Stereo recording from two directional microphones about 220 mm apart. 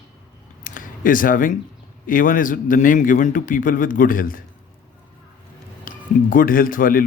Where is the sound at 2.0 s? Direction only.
40° left (ahead or behind).